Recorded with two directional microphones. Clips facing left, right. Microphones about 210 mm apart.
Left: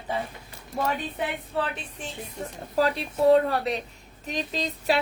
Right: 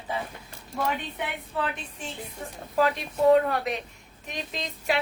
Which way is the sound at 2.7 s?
35° left (ahead or behind).